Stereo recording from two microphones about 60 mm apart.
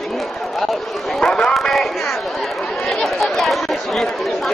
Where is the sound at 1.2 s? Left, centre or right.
Centre.